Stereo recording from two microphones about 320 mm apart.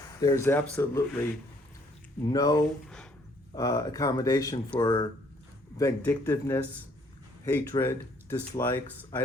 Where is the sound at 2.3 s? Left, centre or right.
Centre.